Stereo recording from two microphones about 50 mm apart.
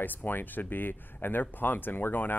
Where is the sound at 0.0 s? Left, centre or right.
Left.